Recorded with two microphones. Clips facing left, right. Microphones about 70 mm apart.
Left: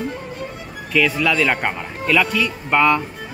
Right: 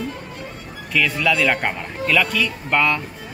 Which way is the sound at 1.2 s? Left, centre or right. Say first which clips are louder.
Even; centre.